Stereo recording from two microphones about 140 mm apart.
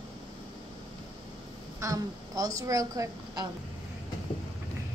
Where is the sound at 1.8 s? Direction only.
25° right (ahead or behind).